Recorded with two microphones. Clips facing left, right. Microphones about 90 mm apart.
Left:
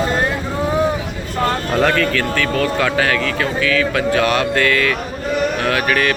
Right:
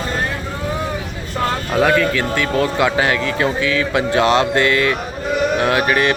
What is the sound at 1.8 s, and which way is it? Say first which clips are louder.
Speech: right 2 dB; 10° right (ahead or behind).